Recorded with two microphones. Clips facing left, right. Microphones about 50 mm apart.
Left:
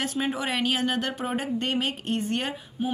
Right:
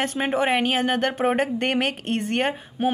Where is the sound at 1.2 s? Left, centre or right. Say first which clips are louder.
Right 6 dB; right.